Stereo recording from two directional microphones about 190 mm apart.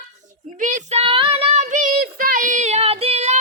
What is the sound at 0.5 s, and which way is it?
Child singing, 40° right (ahead or behind).